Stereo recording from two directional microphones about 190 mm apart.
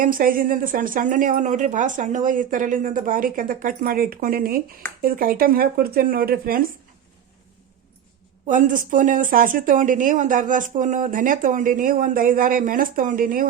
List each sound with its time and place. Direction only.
0.0 s a woman's voice: 45° right (ahead or behind)
8.4 s a woman's voice: 40° right (ahead or behind)